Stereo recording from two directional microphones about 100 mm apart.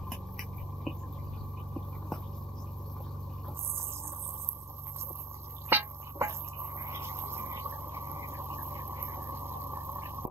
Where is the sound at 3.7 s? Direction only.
25° right (ahead or behind).